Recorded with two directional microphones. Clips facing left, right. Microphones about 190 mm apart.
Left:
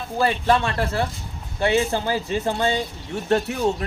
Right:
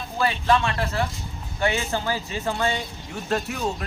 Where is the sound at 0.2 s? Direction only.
35° left (ahead or behind).